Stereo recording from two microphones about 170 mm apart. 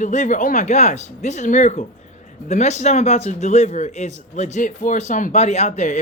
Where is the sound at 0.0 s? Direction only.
45° left (ahead or behind).